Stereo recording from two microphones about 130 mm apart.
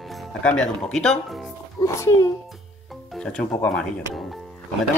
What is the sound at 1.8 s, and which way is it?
Speech, 25° left (ahead or behind).